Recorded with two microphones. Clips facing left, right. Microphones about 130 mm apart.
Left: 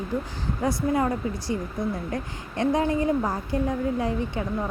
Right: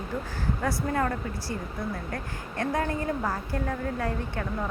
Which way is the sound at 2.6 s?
20° left (ahead or behind).